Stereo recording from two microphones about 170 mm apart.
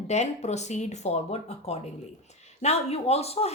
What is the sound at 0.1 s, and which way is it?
Speech, 40° left (ahead or behind).